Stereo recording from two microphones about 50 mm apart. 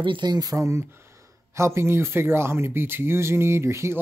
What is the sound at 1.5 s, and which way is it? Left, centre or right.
Speech, right.